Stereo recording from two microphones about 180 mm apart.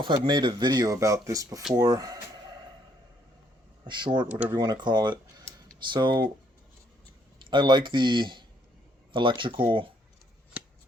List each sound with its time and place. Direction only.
0.0 s speech: 25° right (ahead or behind)
3.8 s speech: 25° right (ahead or behind)
4.3 s speech: 10° right (ahead or behind)
4.5 s speech: 20° right (ahead or behind)
7.5 s speech: 25° right (ahead or behind)